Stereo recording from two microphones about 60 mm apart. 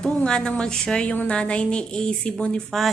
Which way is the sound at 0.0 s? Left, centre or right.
Left.